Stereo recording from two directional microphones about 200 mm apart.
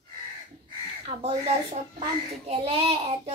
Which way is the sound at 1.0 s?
30° right (ahead or behind).